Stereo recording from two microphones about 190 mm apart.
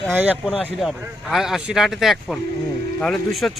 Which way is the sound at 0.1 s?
10° right (ahead or behind).